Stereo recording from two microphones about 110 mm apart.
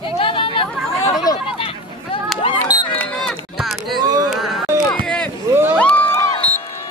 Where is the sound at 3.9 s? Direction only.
35° right (ahead or behind).